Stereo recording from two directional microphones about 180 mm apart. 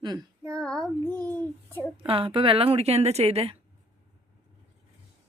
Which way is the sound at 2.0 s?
30° right (ahead or behind).